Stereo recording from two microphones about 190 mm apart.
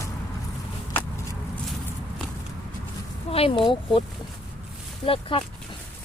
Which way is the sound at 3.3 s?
30° left (ahead or behind).